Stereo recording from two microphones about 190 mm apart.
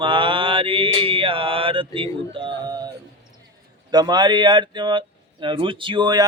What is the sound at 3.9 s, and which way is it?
Mantra, 20° right (ahead or behind).